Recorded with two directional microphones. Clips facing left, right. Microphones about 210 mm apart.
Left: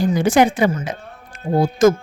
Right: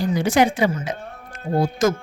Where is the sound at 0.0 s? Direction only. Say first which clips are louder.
Left 3 dB; 50° left (ahead or behind).